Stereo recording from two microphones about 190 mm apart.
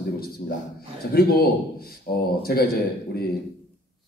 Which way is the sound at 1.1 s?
55° left (ahead or behind).